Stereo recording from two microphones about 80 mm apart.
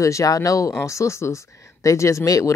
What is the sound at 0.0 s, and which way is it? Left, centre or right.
A woman's voice, left.